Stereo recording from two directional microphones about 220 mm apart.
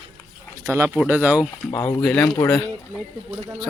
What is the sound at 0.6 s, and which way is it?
Speech, 10° right (ahead or behind).